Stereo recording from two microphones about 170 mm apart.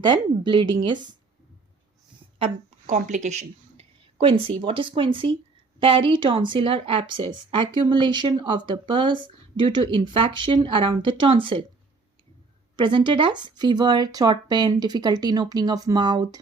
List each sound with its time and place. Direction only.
0.0 s speech: 25° right (ahead or behind)
2.4 s a woman's voice: 45° right (ahead or behind)
12.7 s speech: 30° right (ahead or behind)